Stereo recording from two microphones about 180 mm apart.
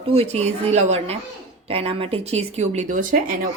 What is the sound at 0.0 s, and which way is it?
Speech, 35° right (ahead or behind).